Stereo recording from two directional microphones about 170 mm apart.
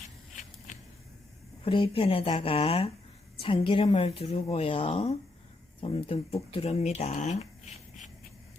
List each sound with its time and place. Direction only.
1.6 s a woman's voice: 30° left (ahead or behind)